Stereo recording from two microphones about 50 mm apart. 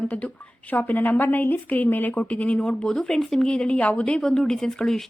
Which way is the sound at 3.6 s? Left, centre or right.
Left.